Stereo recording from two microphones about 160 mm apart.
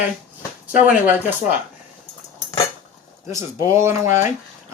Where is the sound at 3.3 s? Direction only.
20° right (ahead or behind).